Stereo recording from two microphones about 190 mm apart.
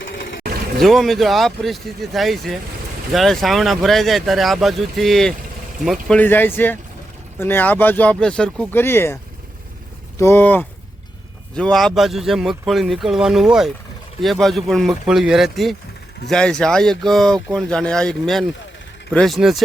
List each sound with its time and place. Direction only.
0.0 s vehicle: 75° left (ahead or behind)
0.8 s speech: centre (ahead or behind)
10.2 s speech: 10° left (ahead or behind)